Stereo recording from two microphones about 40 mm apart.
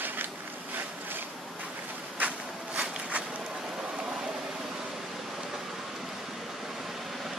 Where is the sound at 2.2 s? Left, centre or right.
Right.